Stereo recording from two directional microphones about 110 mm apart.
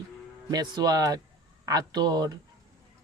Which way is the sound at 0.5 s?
40° right (ahead or behind).